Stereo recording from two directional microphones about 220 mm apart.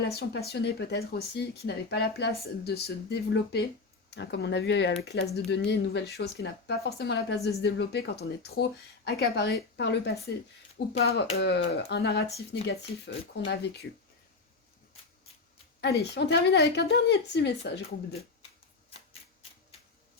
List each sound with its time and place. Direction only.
0.0 s speech: 45° left (ahead or behind)
15.8 s speech: 50° left (ahead or behind)